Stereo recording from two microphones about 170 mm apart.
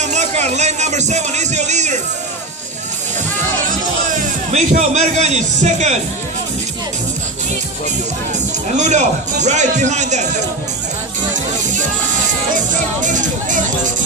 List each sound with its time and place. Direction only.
0.0 s speech: 45° right (ahead or behind)
4.5 s speech: 40° right (ahead or behind)
8.7 s speech: 45° right (ahead or behind)
11.6 s speech: 45° right (ahead or behind)